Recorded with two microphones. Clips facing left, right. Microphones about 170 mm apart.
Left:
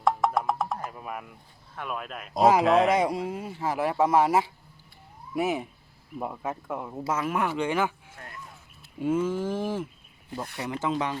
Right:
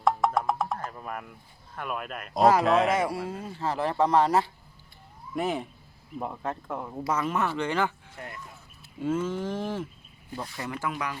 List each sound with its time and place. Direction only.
0.0 s music: centre (ahead or behind)
0.9 s speech: 5° left (ahead or behind)
2.9 s speech: 15° left (ahead or behind)
9.0 s speech: 10° left (ahead or behind)